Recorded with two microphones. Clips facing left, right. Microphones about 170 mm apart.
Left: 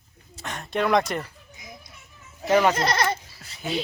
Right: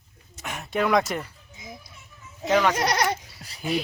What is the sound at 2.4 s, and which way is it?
Speech, 15° left (ahead or behind).